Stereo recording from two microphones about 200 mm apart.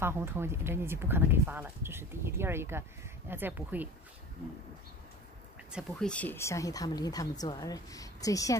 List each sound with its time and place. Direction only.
0.0 s speech: 10° right (ahead or behind)
5.7 s speech: centre (ahead or behind); by 8.5 s 15° left (ahead or behind)